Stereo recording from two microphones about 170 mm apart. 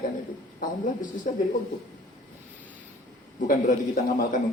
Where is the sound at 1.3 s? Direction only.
50° left (ahead or behind).